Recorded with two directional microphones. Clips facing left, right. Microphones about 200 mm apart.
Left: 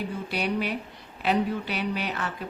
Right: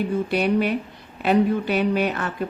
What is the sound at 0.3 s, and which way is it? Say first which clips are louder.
Speech: right 6 dB; 50° right (ahead or behind).